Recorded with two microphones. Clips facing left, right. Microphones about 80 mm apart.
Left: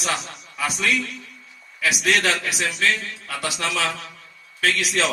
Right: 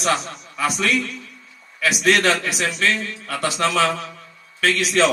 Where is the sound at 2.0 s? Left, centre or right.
Right.